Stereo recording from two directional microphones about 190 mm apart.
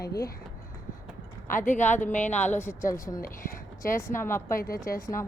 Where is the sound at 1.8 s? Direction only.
10° left (ahead or behind).